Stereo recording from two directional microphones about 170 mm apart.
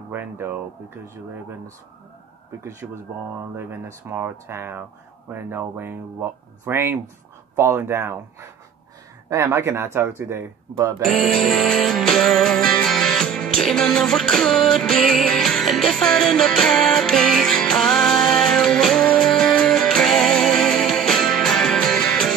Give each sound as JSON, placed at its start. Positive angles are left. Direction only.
{"t": 0.1, "sound": "speech", "side_deg": -10}
{"t": 2.6, "sound": "speech", "side_deg": -15}
{"t": 11.5, "sound": "music", "side_deg": 0}